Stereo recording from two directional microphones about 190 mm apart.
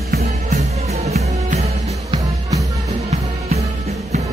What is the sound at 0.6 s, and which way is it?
Music, 35° right (ahead or behind).